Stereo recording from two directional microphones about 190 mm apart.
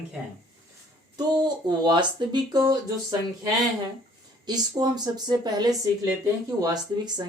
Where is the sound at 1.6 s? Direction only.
25° right (ahead or behind).